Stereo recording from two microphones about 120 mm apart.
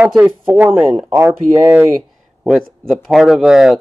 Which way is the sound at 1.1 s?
20° right (ahead or behind).